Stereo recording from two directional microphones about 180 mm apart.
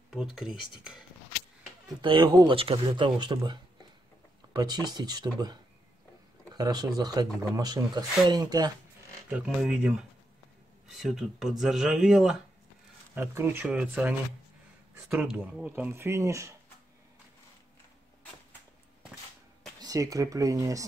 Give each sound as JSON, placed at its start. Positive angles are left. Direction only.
{"t": 0.1, "sound": "speech", "side_deg": 0}
{"t": 2.0, "sound": "speech", "side_deg": -30}
{"t": 4.6, "sound": "speech", "side_deg": -20}
{"t": 9.6, "sound": "speech", "side_deg": -5}
{"t": 13.1, "sound": "speech", "side_deg": -15}
{"t": 19.8, "sound": "speech", "side_deg": -20}